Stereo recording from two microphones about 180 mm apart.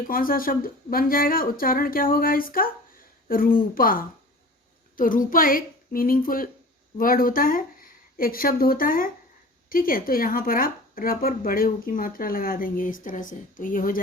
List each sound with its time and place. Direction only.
0.1 s speech: 50° left (ahead or behind)